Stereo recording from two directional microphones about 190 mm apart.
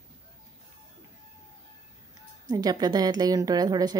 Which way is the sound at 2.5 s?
20° right (ahead or behind).